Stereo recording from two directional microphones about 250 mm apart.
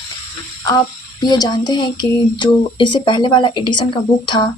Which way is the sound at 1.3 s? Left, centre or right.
Centre.